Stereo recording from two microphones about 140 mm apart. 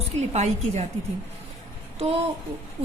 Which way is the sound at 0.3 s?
50° right (ahead or behind).